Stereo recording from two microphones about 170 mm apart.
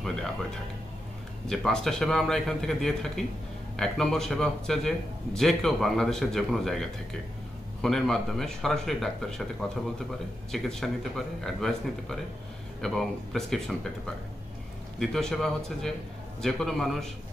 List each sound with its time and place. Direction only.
0.0 s music: centre (ahead or behind)
1.5 s a man's voice: centre (ahead or behind)
15.0 s a man's voice: centre (ahead or behind)